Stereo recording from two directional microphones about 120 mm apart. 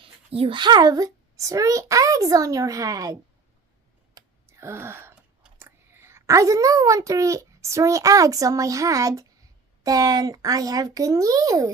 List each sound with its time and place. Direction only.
0.0 s speech: 50° right (ahead or behind); by 3.2 s 30° right (ahead or behind)
4.4 s wail: 20° right (ahead or behind)
5.5 s a woman's voice: 20° right (ahead or behind)